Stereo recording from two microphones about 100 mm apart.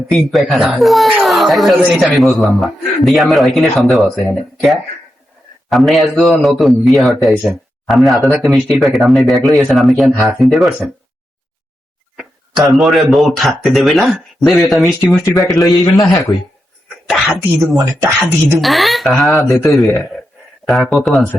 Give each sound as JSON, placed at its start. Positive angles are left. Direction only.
{"t": 0.1, "sound": "speech", "side_deg": 0}
{"t": 12.1, "sound": "speech", "side_deg": -5}
{"t": 15.6, "sound": "a man's voice", "side_deg": 40}
{"t": 17.1, "sound": "speech", "side_deg": 0}
{"t": 18.3, "sound": "speech", "side_deg": -25}
{"t": 18.6, "sound": "speech", "side_deg": 0}